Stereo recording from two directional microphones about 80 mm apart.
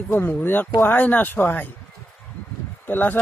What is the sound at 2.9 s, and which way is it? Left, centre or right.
Speech, left.